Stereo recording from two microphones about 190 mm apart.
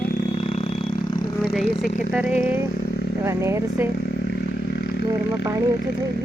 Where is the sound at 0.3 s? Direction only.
30° left (ahead or behind).